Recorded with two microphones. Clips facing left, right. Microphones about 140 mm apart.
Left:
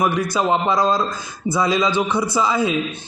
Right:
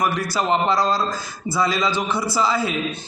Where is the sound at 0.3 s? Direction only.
15° left (ahead or behind).